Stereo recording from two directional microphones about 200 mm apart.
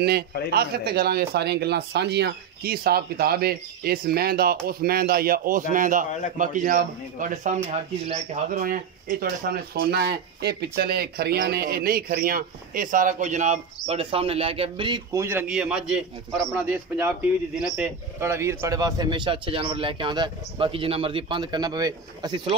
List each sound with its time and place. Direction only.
0.0 s a man's voice: 50° right (ahead or behind); by 15.2 s 25° right (ahead or behind)
15.2 s a man's voice: 10° right (ahead or behind); by 22.6 s 25° right (ahead or behind)